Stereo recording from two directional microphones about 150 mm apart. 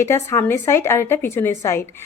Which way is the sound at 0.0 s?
15° left (ahead or behind).